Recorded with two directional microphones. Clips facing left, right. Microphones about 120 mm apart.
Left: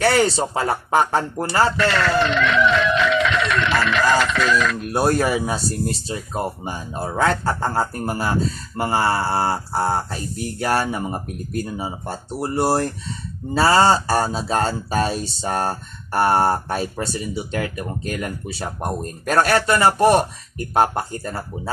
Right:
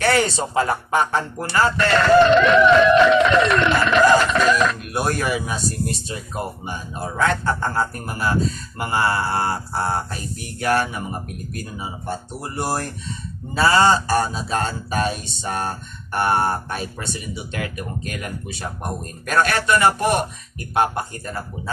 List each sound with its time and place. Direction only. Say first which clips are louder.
0.0 s speech: left 2 dB; 30° left (ahead or behind)
2.3 s music: right 5 dB; 50° right (ahead or behind)
4.9 s speech: left 4 dB; 30° left (ahead or behind)
19.3 s speech: left 2 dB; 35° left (ahead or behind)